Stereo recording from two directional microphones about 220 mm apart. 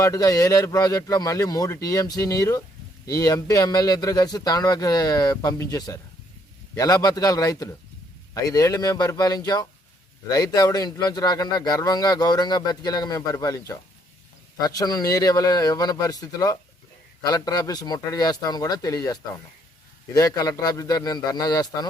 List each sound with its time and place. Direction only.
0.0 s a man's voice: 15° left (ahead or behind)